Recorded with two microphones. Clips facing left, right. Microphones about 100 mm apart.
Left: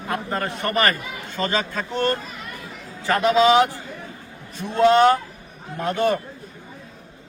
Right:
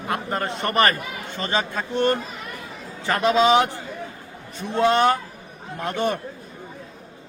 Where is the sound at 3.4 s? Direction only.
25° right (ahead or behind).